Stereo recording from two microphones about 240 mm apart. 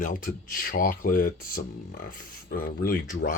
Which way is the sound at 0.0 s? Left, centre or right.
Left.